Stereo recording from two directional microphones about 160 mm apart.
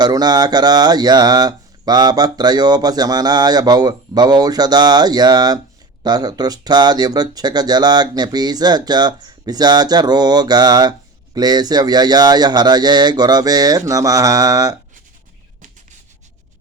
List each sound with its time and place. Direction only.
0.0 s speech: 25° right (ahead or behind)